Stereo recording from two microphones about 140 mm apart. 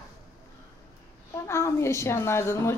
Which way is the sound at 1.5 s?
20° left (ahead or behind).